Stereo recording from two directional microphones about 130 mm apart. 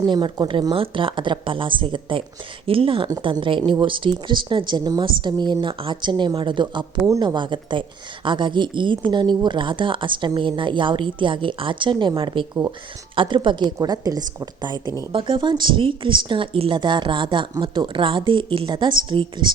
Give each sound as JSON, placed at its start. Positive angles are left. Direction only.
{"t": 0.0, "sound": "speech", "side_deg": -35}